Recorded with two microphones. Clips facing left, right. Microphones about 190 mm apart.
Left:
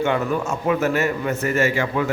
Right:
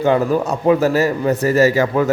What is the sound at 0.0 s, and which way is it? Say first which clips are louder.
A man's voice: right 6 dB; 35° right (ahead or behind).